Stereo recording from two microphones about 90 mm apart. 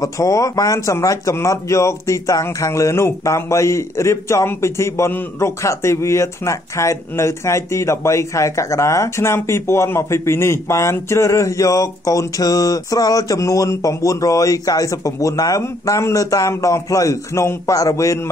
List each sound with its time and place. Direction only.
0.0 s speech: 40° left (ahead or behind)